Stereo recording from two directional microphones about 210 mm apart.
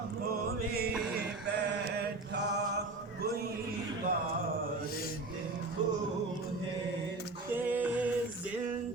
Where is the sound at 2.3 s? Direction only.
55° right (ahead or behind).